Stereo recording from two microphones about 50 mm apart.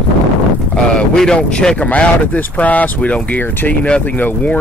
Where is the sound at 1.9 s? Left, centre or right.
Left.